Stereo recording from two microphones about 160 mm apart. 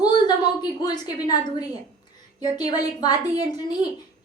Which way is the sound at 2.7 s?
25° left (ahead or behind).